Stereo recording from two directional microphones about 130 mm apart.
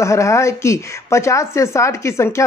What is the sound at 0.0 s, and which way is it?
A woman's voice, 25° left (ahead or behind).